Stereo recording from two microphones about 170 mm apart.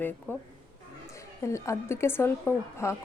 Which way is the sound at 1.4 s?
15° left (ahead or behind).